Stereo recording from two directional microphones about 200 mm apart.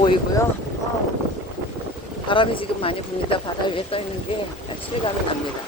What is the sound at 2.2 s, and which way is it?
Speech, 25° left (ahead or behind).